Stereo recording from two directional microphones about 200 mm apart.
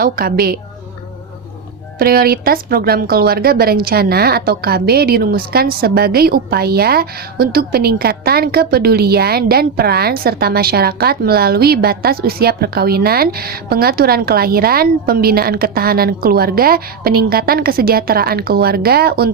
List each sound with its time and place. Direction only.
0.0 s a woman's voice: 50° right (ahead or behind)
2.0 s a woman's voice: 50° right (ahead or behind)